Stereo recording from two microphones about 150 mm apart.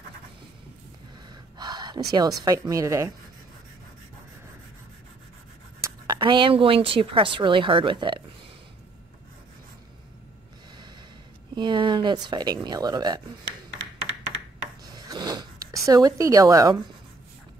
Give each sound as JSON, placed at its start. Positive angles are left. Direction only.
{"t": 1.3, "sound": "gasp", "side_deg": -30}
{"t": 2.7, "sound": "speech", "side_deg": -20}
{"t": 5.8, "sound": "speech", "side_deg": -30}
{"t": 11.5, "sound": "speech", "side_deg": -30}
{"t": 14.9, "sound": "zipper", "side_deg": -25}